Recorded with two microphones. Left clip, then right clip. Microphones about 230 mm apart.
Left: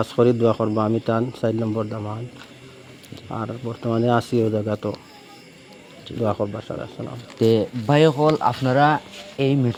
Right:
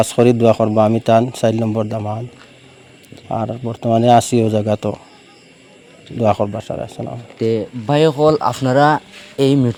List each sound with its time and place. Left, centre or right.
0.0 s a man's voice: right
3.2 s a man's voice: right
6.2 s a man's voice: right
7.3 s speech: centre
7.9 s a man's voice: right